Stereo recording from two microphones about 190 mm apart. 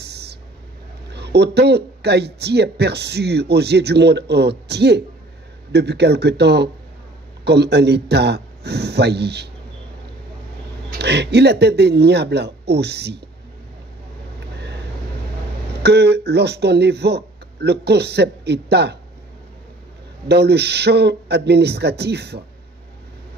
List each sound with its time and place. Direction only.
0.0 s a sound: 60° right (ahead or behind)
1.1 s speech: 60° right (ahead or behind)
10.9 s speech: 60° right (ahead or behind)
15.8 s speech: 60° right (ahead or behind)
20.2 s speech: 60° right (ahead or behind)